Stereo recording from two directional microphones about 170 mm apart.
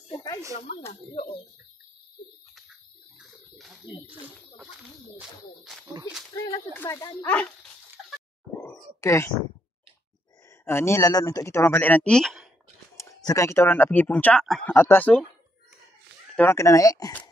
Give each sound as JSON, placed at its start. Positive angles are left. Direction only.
{"t": 0.1, "sound": "a sound", "side_deg": 25}
{"t": 2.5, "sound": "bathtub", "side_deg": 0}
{"t": 6.8, "sound": "speech", "side_deg": 20}
{"t": 7.2, "sound": "speech", "side_deg": 5}
{"t": 9.0, "sound": "speech", "side_deg": 15}
{"t": 10.6, "sound": "speech", "side_deg": 15}
{"t": 12.9, "sound": "speech", "side_deg": 15}
{"t": 16.3, "sound": "speech", "side_deg": 15}